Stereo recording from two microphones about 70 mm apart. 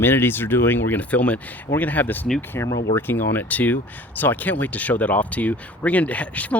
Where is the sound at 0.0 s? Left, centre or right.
Left.